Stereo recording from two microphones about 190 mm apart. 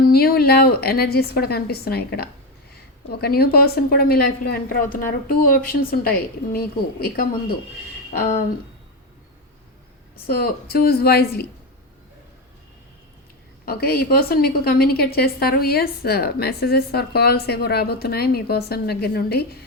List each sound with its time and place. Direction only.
0.0 s a woman's voice: 55° left (ahead or behind)
10.2 s a woman's voice: 50° left (ahead or behind)
13.7 s a woman's voice: 50° left (ahead or behind)